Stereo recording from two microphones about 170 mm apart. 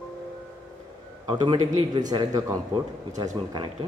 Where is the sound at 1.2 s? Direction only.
25° right (ahead or behind).